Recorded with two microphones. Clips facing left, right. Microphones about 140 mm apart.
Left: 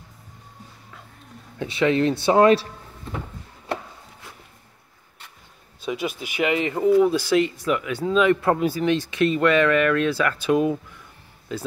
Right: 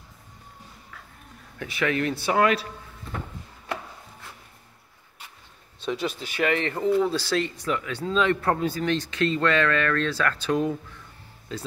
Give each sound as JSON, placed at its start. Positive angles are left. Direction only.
{"t": 1.6, "sound": "speech", "side_deg": 25}
{"t": 5.8, "sound": "speech", "side_deg": 10}